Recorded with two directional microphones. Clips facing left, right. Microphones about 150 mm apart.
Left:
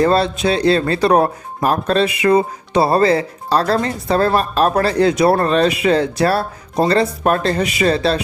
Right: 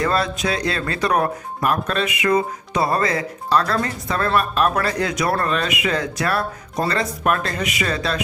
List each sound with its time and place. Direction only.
0.0 s speech: 30° left (ahead or behind)